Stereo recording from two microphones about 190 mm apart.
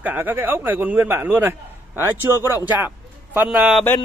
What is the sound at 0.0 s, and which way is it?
Speech, 10° right (ahead or behind).